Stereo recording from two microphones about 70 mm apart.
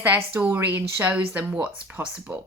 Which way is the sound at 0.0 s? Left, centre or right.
Right.